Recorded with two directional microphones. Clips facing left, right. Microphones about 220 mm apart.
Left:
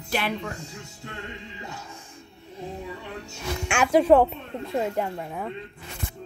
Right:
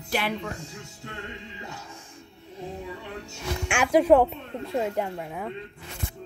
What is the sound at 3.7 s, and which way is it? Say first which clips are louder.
Speech: left 1 dB; 15° right (ahead or behind).